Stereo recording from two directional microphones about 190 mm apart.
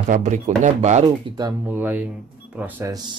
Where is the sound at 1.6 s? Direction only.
10° right (ahead or behind).